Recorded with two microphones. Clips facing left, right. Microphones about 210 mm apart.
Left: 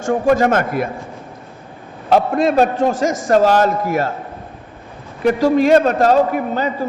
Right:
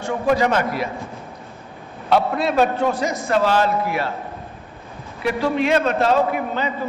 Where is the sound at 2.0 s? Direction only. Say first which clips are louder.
Left 4 dB; 45° left (ahead or behind).